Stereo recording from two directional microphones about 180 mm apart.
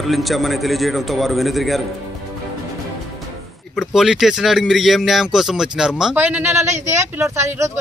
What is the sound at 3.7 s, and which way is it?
A man's voice, 5° right (ahead or behind).